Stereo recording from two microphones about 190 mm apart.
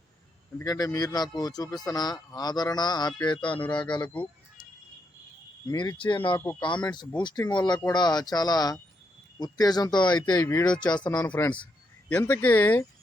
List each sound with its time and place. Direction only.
0.6 s speech: 20° left (ahead or behind)
5.6 s speech: 20° left (ahead or behind)
11.3 s speech: 10° left (ahead or behind)